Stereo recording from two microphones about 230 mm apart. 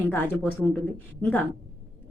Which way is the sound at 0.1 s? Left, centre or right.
Centre.